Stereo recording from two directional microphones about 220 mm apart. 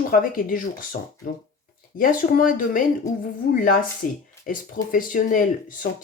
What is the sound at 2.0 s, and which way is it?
Speech, 40° left (ahead or behind).